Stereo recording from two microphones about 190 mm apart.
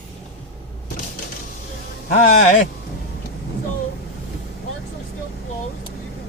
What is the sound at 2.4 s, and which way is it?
Speech, 40° left (ahead or behind).